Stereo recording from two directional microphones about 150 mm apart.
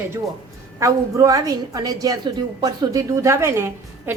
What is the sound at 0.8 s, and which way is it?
A woman's voice, 20° right (ahead or behind).